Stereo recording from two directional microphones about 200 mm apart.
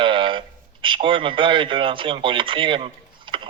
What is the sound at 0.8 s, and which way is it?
Speech, 25° right (ahead or behind).